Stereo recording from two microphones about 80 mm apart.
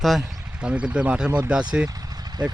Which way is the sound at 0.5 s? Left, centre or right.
Centre.